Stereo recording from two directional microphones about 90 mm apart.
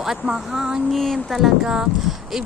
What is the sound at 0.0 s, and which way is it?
Speech, 5° right (ahead or behind).